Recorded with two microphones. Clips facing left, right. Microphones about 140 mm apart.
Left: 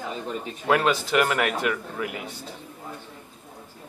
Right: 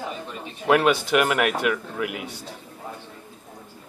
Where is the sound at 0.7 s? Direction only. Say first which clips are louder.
Right 3 dB; 10° right (ahead or behind).